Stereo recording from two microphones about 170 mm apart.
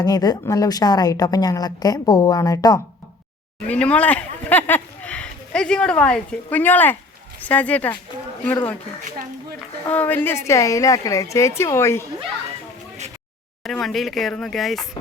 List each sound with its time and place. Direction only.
0.0 s a woman's voice: 25° left (ahead or behind)
3.7 s a woman's voice: 5° left (ahead or behind)
9.8 s a woman's voice: 10° left (ahead or behind)
13.7 s speech: centre (ahead or behind)